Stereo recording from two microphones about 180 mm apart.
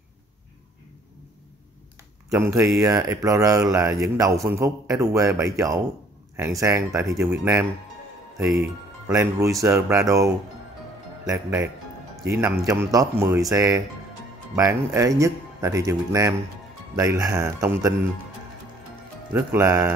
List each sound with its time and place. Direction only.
2.2 s speech: 10° right (ahead or behind)
9.1 s speech: 15° right (ahead or behind)
19.3 s speech: 15° right (ahead or behind)